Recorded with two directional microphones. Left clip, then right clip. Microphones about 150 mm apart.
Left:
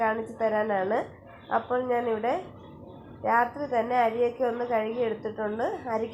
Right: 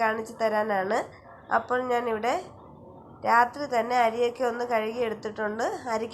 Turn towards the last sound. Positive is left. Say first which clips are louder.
# even
turn(degrees=-25)  # may be behind; listen again after turning